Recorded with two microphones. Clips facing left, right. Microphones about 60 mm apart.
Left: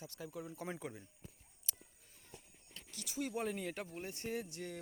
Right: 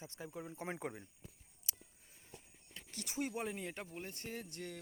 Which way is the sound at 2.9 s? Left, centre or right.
Right.